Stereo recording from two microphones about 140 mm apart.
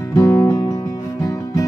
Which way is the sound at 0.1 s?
20° left (ahead or behind).